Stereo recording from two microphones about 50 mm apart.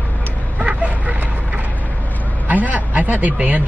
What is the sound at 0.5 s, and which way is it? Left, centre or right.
Vehicle, right.